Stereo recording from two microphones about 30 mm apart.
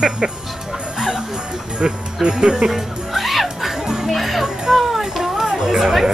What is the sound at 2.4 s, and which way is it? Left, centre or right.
Speech, right.